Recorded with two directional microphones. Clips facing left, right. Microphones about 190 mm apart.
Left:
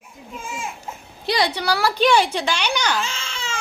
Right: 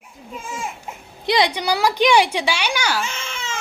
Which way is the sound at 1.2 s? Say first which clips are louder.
Right 2 dB; 20° right (ahead or behind).